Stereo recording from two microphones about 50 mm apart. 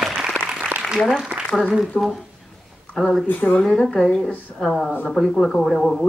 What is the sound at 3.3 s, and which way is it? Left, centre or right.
Speech, left.